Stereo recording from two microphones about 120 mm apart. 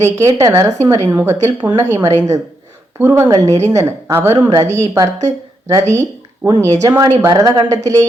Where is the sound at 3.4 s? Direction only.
65° right (ahead or behind).